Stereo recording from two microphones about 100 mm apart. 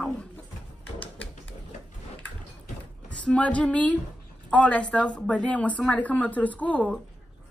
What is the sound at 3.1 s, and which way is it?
Speech, 10° left (ahead or behind).